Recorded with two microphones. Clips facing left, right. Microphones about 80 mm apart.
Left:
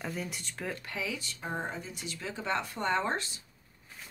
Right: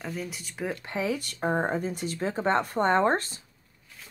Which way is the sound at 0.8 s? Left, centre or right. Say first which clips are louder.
Right 7 dB; right.